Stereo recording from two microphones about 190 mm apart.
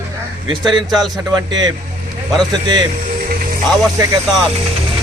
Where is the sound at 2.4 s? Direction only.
20° right (ahead or behind).